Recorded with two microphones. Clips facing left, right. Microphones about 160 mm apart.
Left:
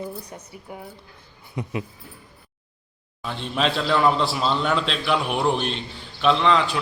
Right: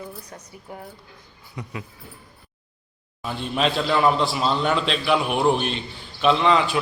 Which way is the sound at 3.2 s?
5° right (ahead or behind).